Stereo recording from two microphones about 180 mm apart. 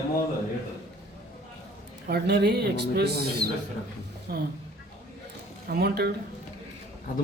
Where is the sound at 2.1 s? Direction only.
65° right (ahead or behind).